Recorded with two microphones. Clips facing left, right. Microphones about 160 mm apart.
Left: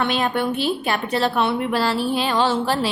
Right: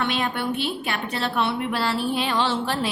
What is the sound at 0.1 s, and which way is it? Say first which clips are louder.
A woman's voice: left 4 dB; 40° left (ahead or behind).